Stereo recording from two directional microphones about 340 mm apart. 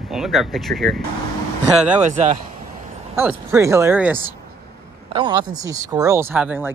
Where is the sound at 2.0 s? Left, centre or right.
Right.